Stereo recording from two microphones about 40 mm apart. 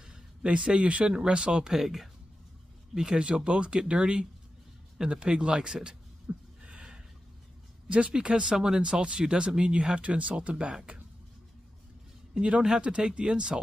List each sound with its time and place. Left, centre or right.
0.0 s speech: right
1.8 s speech: centre
3.2 s speech: right
6.3 s a sound: right
6.6 s a sound: right
8.1 s speech: right
12.4 s speech: right